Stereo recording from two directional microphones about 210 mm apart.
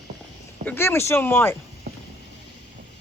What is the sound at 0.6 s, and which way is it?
Speech, 10° left (ahead or behind).